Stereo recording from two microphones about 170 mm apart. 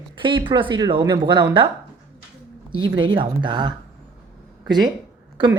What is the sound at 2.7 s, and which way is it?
Speech, 25° right (ahead or behind).